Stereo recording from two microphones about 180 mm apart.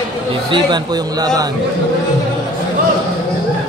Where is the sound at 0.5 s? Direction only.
25° right (ahead or behind).